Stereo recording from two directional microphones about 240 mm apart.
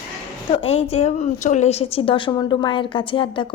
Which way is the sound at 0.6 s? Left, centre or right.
Left.